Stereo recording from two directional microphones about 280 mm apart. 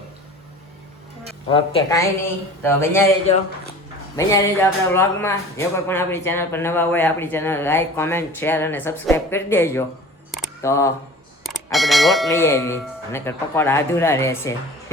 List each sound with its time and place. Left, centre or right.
1.5 s speech: centre
4.2 s speech: centre
11.4 s speech: centre